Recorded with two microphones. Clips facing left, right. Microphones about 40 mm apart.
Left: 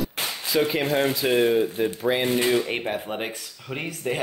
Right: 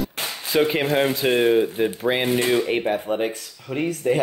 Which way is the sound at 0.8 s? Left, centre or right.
Centre.